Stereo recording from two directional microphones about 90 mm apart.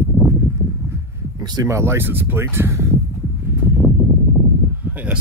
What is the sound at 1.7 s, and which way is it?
Speech, 30° right (ahead or behind).